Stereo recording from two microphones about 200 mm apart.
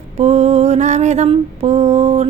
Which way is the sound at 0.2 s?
35° right (ahead or behind).